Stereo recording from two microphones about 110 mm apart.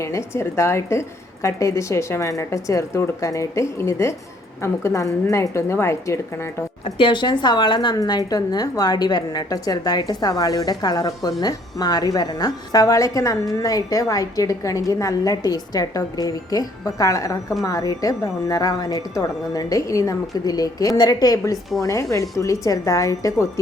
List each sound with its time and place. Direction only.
0.0 s a woman's voice: 25° left (ahead or behind)
6.8 s a woman's voice: 50° left (ahead or behind); by 23.5 s 30° left (ahead or behind)